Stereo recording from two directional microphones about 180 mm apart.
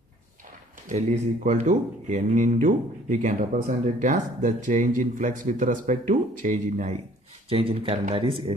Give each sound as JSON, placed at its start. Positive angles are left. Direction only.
{"t": 0.8, "sound": "speech", "side_deg": -40}